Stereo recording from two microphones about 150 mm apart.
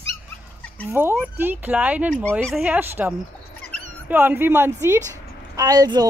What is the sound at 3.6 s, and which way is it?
Dog, 10° left (ahead or behind).